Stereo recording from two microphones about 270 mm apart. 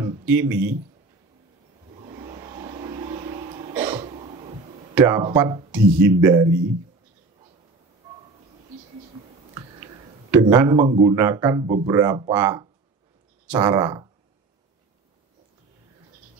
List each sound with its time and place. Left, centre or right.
0.0 s speech: centre
2.0 s vehicle: right
3.7 s throat clearing: centre
4.0 s a sound: right
4.9 s speech: centre
10.3 s speech: centre